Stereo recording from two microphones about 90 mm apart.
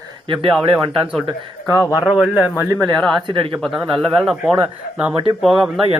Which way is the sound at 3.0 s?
5° left (ahead or behind).